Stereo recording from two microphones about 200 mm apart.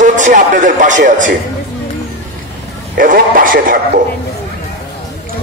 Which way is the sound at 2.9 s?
45° right (ahead or behind).